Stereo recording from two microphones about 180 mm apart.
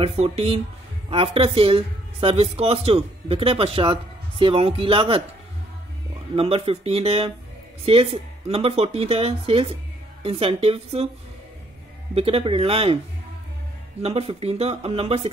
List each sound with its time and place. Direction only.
0.0 s a woman's voice: 35° right (ahead or behind)
6.3 s a woman's voice: 35° right (ahead or behind)
12.2 s a woman's voice: 35° right (ahead or behind)
14.0 s a woman's voice: 35° right (ahead or behind)